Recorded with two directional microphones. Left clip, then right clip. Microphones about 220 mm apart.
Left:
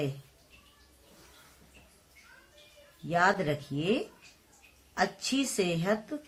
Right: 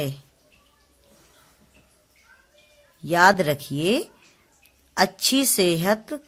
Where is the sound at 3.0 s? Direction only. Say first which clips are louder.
Right 9 dB; 50° right (ahead or behind).